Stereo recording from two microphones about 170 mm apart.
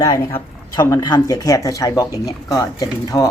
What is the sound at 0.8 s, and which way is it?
Speech, 20° left (ahead or behind).